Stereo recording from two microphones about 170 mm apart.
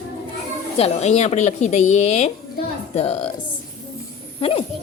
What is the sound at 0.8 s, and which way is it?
A woman's voice, 40° left (ahead or behind).